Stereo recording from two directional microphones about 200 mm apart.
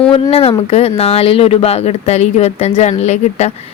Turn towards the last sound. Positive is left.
turn(degrees=35)  # may be behind; listen again after turning